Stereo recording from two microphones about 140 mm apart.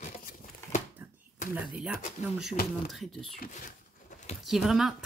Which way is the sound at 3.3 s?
85° left.